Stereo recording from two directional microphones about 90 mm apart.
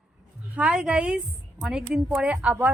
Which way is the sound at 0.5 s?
15° right (ahead or behind).